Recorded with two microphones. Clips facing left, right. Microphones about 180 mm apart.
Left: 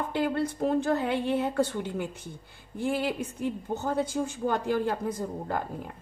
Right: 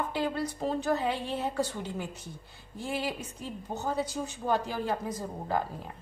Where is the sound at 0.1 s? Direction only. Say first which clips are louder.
Left 4 dB; 55° left (ahead or behind).